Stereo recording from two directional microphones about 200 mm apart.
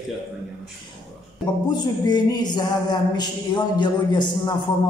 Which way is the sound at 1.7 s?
20° left (ahead or behind).